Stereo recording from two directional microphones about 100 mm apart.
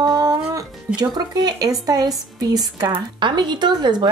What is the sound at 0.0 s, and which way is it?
Music, 40° right (ahead or behind).